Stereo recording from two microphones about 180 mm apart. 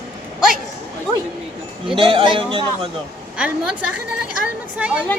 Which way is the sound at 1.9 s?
30° right (ahead or behind).